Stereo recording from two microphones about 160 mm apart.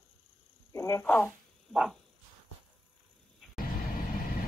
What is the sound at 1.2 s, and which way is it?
Zipper, centre (ahead or behind).